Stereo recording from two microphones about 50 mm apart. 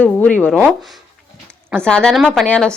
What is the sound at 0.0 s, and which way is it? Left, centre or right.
Speech, left.